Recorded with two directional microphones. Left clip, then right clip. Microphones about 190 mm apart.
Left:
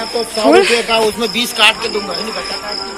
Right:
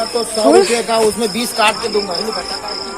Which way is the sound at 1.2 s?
55° right (ahead or behind).